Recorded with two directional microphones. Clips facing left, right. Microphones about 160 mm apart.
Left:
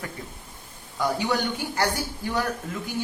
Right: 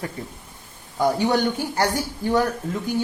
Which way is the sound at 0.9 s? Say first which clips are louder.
Right 5 dB; 40° right (ahead or behind).